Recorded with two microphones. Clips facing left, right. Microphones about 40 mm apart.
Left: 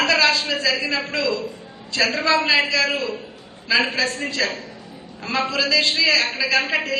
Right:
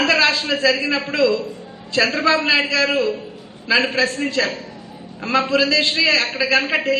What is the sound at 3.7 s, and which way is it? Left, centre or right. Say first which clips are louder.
Speech: right 2 dB; right.